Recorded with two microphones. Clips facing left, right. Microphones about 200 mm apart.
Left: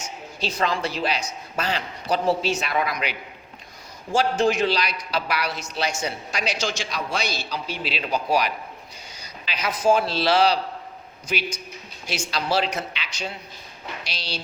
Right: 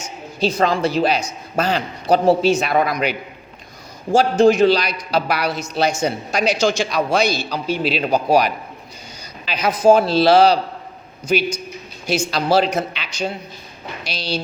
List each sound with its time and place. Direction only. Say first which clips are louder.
0.3 s a man's voice: right 8 dB; 45° right (ahead or behind)